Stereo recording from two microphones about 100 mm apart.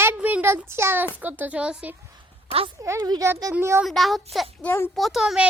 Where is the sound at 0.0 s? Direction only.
20° right (ahead or behind).